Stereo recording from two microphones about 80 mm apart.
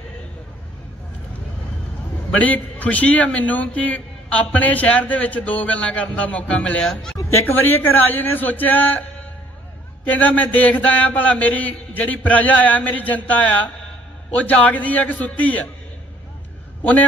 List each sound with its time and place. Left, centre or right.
2.3 s a man's voice: centre
7.6 s a man's voice: left
10.0 s a man's voice: left